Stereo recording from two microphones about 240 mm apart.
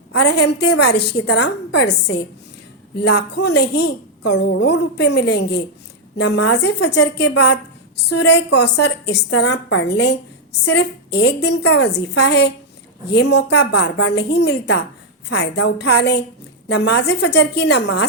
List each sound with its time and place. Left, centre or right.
0.1 s a woman's voice: left